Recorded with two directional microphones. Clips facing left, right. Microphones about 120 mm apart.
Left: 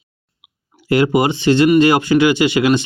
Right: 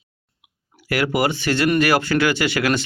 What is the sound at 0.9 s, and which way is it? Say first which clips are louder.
Speech: left 6 dB; 20° left (ahead or behind).